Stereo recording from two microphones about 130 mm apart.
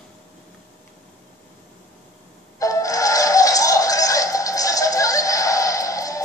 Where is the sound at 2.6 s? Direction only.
25° left (ahead or behind).